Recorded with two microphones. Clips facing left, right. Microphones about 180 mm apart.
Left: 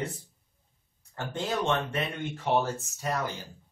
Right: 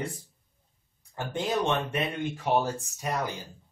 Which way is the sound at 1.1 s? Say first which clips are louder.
Right 2 dB; 15° right (ahead or behind).